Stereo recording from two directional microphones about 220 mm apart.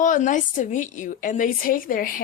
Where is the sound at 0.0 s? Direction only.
35° left (ahead or behind).